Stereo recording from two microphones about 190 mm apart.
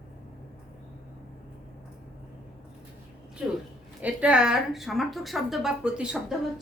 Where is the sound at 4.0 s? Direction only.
5° right (ahead or behind).